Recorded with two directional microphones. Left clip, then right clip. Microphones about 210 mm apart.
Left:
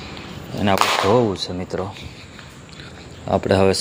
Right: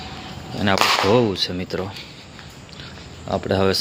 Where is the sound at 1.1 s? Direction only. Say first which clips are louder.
Even; 10° right (ahead or behind).